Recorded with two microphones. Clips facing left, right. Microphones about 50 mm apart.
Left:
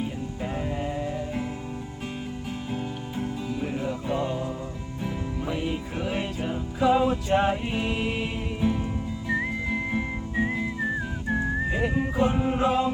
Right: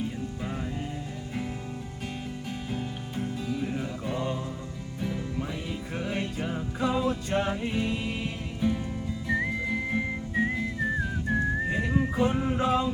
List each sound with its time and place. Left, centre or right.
2.6 s music: centre
6.0 s music: centre
7.0 s music: centre
9.2 s whistling: centre
11.9 s music: centre
12.5 s music: left